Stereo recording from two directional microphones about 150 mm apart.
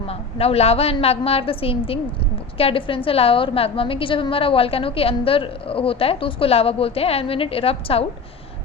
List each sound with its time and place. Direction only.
0.1 s a woman's voice: 40° left (ahead or behind)